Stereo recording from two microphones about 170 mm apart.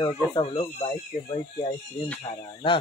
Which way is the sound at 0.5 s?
35° left (ahead or behind).